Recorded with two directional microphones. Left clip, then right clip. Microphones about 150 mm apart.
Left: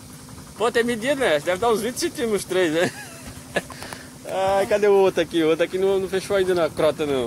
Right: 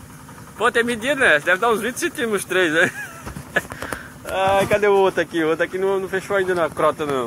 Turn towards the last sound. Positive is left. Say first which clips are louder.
# right 1 dB
turn(degrees=40)  # may be behind; listen again after turning